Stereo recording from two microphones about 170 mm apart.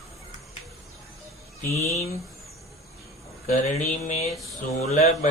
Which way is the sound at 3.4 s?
45° left (ahead or behind).